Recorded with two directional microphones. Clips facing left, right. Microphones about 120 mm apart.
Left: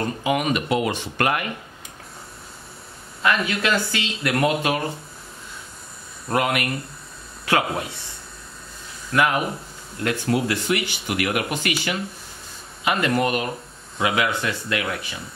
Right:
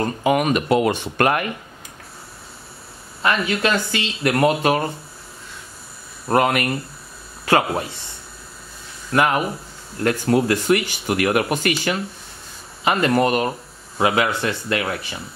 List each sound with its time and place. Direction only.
0.0 s speech: 45° right (ahead or behind)
3.2 s speech: 30° right (ahead or behind)
6.2 s speech: 40° right (ahead or behind)
9.1 s speech: 35° right (ahead or behind)
12.8 s speech: 40° right (ahead or behind)